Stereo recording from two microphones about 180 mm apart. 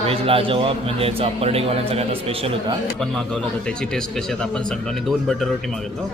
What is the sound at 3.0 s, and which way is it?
Speech, 5° left (ahead or behind).